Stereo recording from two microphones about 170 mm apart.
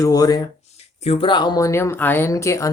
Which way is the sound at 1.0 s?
35° left (ahead or behind).